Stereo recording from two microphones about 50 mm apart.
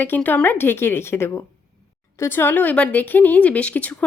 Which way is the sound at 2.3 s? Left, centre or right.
Left.